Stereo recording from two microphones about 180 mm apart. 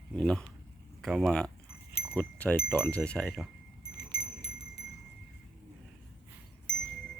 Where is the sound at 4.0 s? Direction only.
60° left (ahead or behind).